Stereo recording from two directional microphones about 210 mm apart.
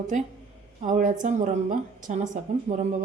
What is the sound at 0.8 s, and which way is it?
Speech, 35° right (ahead or behind).